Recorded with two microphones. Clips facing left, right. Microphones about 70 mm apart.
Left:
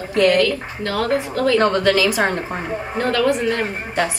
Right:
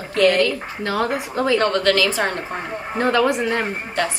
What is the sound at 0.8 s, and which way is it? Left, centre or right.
Speech, right.